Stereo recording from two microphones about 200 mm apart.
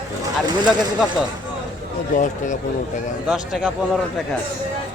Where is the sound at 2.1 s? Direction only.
40° left (ahead or behind).